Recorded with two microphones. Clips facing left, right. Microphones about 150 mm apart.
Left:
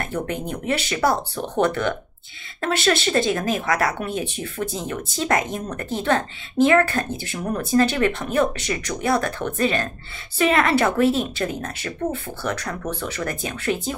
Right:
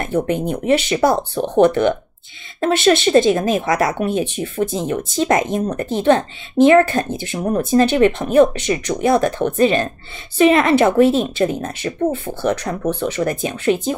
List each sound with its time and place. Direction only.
0.0 s speech: 25° right (ahead or behind)